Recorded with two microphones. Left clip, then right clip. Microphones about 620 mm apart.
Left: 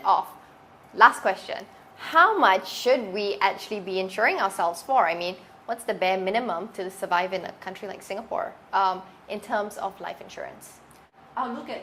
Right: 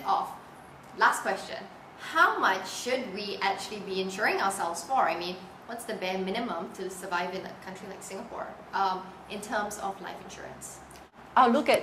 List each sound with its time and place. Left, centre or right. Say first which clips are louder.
0.1 s a sound: left 5 dB; left
2.0 s a woman's voice: left 6 dB; left
8.7 s a woman's voice: left 5 dB; left
11.7 s a woman's voice: right 11 dB; right